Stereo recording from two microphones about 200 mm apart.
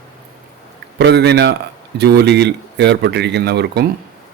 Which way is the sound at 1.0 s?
55° right (ahead or behind).